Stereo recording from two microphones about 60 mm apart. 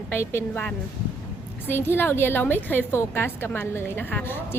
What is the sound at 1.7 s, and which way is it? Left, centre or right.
A woman's voice, left.